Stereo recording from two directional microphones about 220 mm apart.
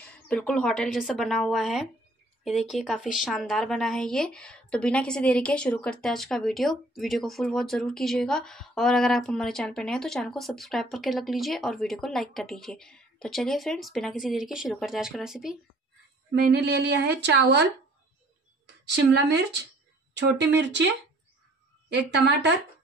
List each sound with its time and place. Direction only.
0.0 s a woman's voice: 5° left (ahead or behind)
16.5 s a woman's voice: 50° right (ahead or behind)
18.9 s a woman's voice: 50° right (ahead or behind)